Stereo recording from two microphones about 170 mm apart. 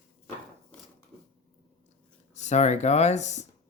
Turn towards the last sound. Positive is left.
turn(degrees=45)  # may be behind; listen again after turning